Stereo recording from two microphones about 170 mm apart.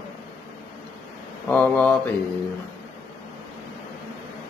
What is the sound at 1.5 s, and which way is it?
Speech, 10° left (ahead or behind).